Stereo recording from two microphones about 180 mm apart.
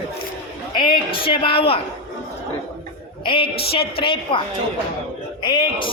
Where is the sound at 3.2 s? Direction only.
30° left (ahead or behind).